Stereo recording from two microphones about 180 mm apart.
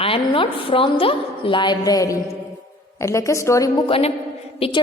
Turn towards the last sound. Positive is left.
turn(degrees=35)  # may be behind; listen again after turning